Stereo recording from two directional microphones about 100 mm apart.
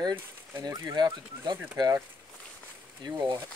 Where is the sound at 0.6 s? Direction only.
40° right (ahead or behind).